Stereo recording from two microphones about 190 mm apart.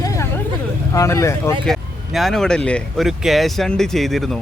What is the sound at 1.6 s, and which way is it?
Speech, centre (ahead or behind).